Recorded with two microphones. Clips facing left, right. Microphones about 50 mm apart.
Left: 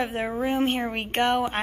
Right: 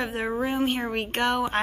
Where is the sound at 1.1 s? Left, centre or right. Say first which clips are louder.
Left 3 dB; left.